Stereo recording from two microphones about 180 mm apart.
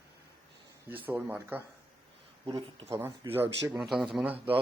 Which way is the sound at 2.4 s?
30° right (ahead or behind).